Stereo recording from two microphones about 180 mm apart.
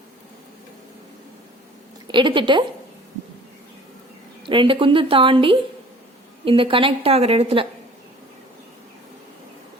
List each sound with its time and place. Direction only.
2.0 s a woman's voice: 25° right (ahead or behind)
4.4 s a woman's voice: 25° right (ahead or behind)